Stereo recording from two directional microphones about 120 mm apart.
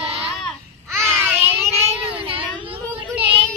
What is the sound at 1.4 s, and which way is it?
Child singing, 60° right (ahead or behind).